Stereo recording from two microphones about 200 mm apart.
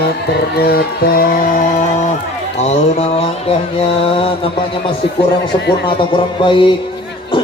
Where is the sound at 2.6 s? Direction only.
35° left (ahead or behind).